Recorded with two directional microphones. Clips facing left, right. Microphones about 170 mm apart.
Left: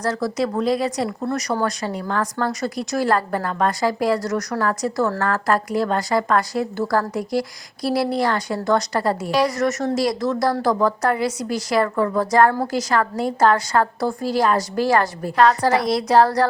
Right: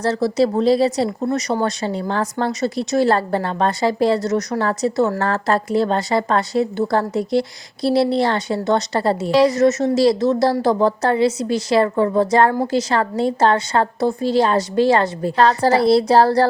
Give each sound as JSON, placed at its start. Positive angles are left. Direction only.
{"t": 0.0, "sound": "speech", "side_deg": -25}